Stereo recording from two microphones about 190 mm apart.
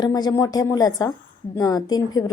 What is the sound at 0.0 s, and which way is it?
A woman's voice, 20° left (ahead or behind).